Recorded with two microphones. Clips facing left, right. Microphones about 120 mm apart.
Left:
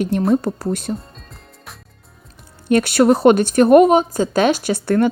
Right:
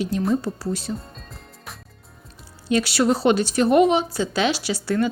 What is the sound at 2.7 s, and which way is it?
Speech, 55° left (ahead or behind).